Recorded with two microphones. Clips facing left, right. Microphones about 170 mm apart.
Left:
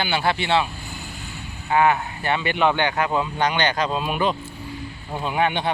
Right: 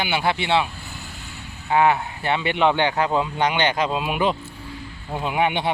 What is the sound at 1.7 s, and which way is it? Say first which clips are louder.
Speech: even; 25° right (ahead or behind).